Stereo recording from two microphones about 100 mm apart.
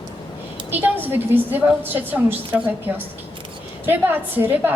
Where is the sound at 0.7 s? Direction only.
20° right (ahead or behind).